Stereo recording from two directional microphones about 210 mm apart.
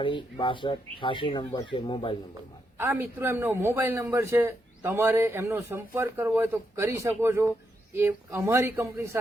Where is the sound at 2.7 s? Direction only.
10° right (ahead or behind).